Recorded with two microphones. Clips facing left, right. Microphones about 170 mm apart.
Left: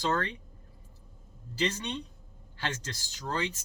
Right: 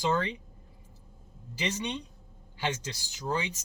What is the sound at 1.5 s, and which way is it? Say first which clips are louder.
Speech: left 1 dB; 15° right (ahead or behind).